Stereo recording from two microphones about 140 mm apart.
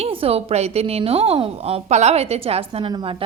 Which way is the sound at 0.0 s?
45° right (ahead or behind).